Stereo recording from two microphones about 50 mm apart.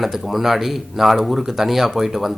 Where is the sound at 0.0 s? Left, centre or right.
Centre.